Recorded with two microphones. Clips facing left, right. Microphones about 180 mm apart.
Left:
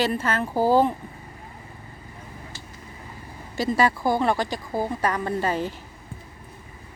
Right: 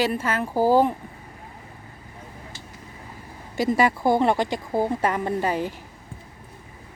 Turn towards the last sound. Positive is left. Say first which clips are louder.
# right 1 dB
turn(degrees=-15)  # may be behind; listen again after turning